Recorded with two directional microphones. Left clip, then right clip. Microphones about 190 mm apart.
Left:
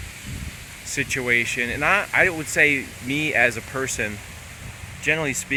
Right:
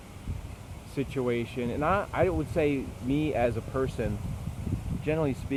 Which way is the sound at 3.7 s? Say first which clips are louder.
Left 3 dB; 25° left (ahead or behind).